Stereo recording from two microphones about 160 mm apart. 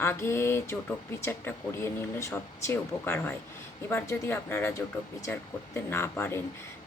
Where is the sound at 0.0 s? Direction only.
15° left (ahead or behind).